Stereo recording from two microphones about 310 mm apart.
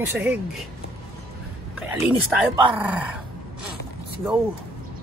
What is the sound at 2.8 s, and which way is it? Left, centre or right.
Speech, centre.